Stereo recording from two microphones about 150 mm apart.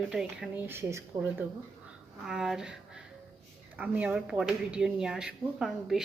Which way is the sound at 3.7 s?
10° right (ahead or behind).